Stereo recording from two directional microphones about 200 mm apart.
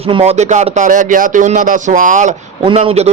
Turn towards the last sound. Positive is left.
turn(degrees=-30)  # may be behind; listen again after turning